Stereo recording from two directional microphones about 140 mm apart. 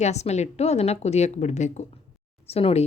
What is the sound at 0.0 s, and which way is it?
A woman's voice, 55° left (ahead or behind).